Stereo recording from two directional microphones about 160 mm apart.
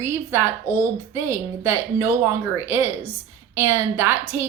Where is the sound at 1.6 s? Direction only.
15° right (ahead or behind).